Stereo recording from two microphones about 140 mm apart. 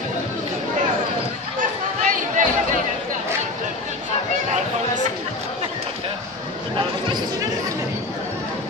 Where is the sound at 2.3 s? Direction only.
65° right (ahead or behind).